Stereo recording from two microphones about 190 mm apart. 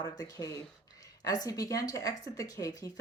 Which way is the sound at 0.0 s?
15° left (ahead or behind).